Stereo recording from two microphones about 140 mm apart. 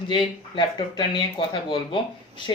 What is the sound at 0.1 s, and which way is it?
A woman's voice, 35° left (ahead or behind).